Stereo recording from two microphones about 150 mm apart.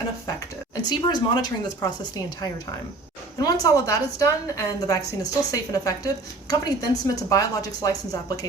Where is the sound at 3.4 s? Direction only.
25° left (ahead or behind).